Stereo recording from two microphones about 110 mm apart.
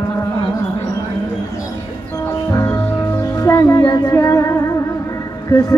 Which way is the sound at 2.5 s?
25° left (ahead or behind).